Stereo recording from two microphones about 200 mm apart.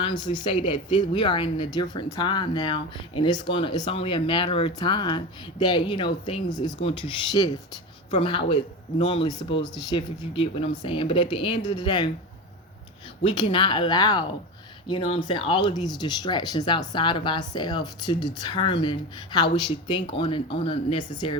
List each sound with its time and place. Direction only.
0.0 s speech: 20° left (ahead or behind)
13.2 s speech: 25° left (ahead or behind)